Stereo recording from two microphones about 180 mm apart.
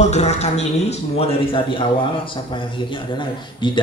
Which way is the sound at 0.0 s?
40° left (ahead or behind).